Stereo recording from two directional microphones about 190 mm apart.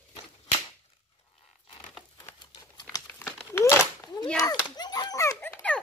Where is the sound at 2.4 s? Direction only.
20° left (ahead or behind).